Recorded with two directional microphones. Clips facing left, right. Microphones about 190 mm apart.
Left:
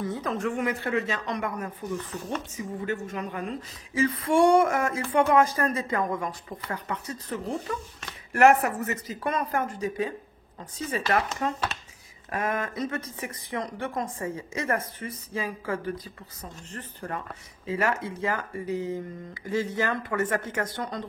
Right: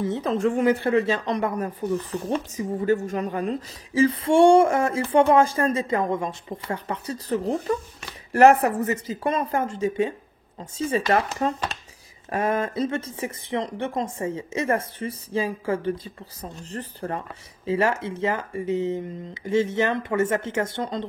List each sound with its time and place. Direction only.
0.0 s speech: 25° right (ahead or behind)